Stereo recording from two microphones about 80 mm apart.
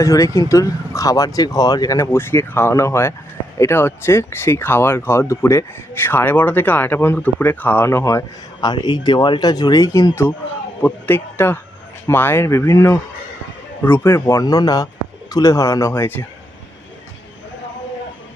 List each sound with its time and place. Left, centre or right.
0.0 s speech: left
2.0 s speech: left
8.6 s speech: left
9.4 s speech: left
10.8 s speech: left
14.4 s speech: left